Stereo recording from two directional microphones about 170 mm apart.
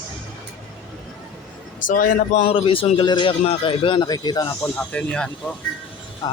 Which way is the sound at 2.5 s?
30° left (ahead or behind).